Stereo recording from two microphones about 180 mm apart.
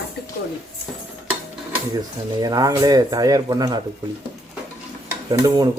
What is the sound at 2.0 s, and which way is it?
Speech, 20° right (ahead or behind).